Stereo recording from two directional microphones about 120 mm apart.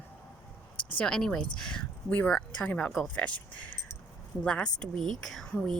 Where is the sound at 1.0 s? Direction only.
5° left (ahead or behind).